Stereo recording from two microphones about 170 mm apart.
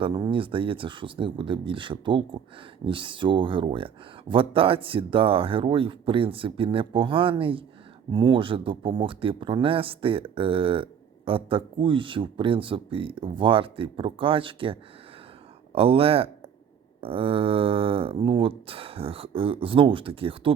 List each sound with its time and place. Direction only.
0.0 s speech: 30° right (ahead or behind)